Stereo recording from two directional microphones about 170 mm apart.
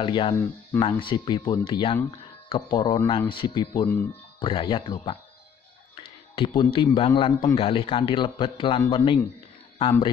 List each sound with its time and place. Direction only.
0.0 s speech: 30° left (ahead or behind)
6.3 s a man's voice: 30° left (ahead or behind)